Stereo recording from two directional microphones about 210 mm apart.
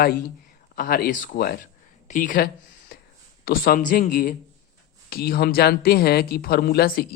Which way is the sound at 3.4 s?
45° left (ahead or behind).